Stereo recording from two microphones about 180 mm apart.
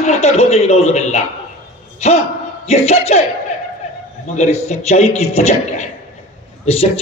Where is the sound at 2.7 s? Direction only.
35° left (ahead or behind).